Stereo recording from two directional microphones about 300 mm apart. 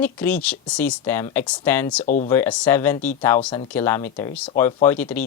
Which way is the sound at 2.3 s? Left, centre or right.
Centre.